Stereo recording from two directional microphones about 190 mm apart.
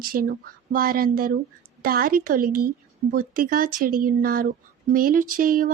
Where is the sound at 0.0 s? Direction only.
50° right (ahead or behind).